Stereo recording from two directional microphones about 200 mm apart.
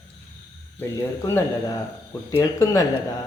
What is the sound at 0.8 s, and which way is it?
Speech, 15° left (ahead or behind).